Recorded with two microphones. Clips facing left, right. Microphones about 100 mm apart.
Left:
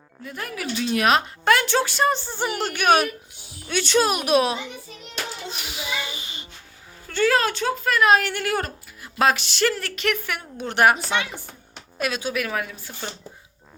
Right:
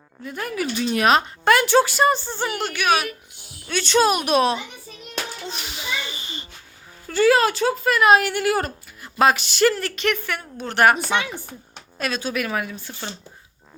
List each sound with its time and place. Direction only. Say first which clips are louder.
0.3 s speech: right 4 dB; centre (ahead or behind)
2.5 s a woman's voice: left 2 dB; 35° left (ahead or behind)
2.7 s speech: left 3 dB; 45° left (ahead or behind)
3.7 s speech: right 2 dB; 10° left (ahead or behind)
5.5 s a sound: right 1 dB; 5° left (ahead or behind)
7.1 s speech: right 4 dB; 5° right (ahead or behind); by 10.9 s 15° left (ahead or behind)
11.9 s speech: even; 10° left (ahead or behind)